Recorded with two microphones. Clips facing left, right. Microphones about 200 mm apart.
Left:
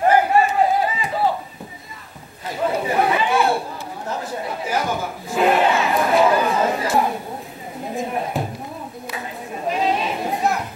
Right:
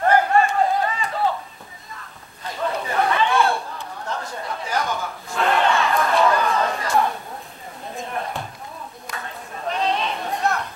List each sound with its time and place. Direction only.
0.0 s crowd: 5° left (ahead or behind)
2.7 s chatter: 15° left (ahead or behind)
4.8 s a sound: 5° left (ahead or behind)
6.1 s chatter: 5° left (ahead or behind)
6.4 s chatter: 20° left (ahead or behind)
8.0 s a sound: 5° left (ahead or behind)